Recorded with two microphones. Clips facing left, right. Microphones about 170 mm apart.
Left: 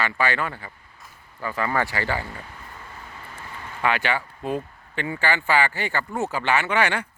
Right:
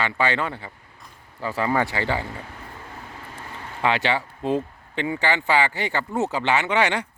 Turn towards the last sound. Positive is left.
turn(degrees=-20)  # may be behind; listen again after turning